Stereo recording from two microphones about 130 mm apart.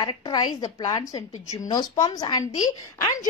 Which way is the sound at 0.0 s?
35° left (ahead or behind).